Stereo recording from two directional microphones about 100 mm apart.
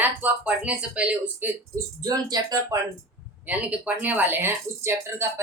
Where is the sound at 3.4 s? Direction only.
15° right (ahead or behind).